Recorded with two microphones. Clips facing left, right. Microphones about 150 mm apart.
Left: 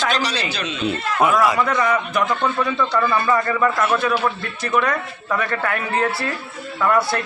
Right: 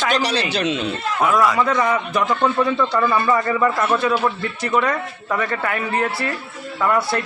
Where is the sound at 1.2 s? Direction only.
10° left (ahead or behind).